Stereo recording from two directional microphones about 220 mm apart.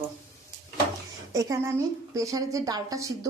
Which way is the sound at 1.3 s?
15° right (ahead or behind).